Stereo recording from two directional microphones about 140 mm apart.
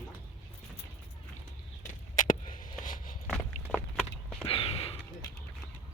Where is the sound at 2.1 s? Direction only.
65° left (ahead or behind).